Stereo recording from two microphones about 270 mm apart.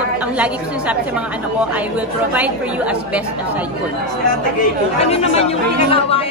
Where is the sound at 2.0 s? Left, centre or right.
Centre.